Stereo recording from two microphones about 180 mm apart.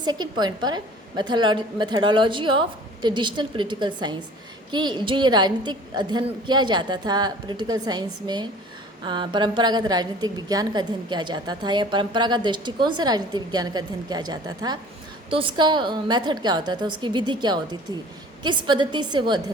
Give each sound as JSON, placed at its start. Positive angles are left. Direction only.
{"t": 0.0, "sound": "a woman's voice", "side_deg": -25}